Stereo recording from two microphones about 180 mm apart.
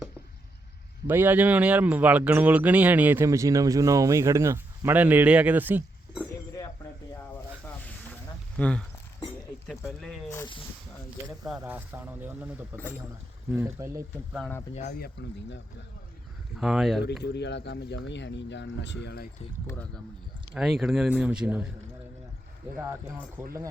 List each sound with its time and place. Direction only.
1.0 s speech: 10° right (ahead or behind)
8.1 s a sound: 5° left (ahead or behind)
9.6 s speech: 5° left (ahead or behind)
10.4 s speech: 30° left (ahead or behind)
11.4 s speech: 5° right (ahead or behind)
14.9 s speech: 65° left (ahead or behind)
16.6 s speech: centre (ahead or behind)
17.3 s speech: 75° left (ahead or behind)
19.6 s speech: 10° left (ahead or behind)
20.5 s speech: centre (ahead or behind)
22.8 s speech: 10° right (ahead or behind)